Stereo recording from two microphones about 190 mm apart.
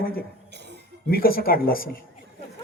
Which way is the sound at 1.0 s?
50° left (ahead or behind).